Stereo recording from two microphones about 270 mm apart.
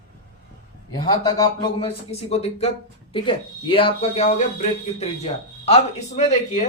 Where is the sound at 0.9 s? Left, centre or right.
Centre.